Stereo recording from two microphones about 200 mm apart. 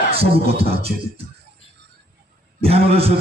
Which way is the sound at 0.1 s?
30° right (ahead or behind).